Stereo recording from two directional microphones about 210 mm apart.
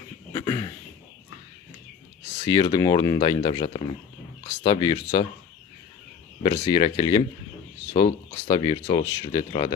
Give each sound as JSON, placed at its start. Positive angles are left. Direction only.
{"t": 0.3, "sound": "a sound", "side_deg": 15}
{"t": 2.5, "sound": "speech", "side_deg": 20}
{"t": 6.4, "sound": "speech", "side_deg": 20}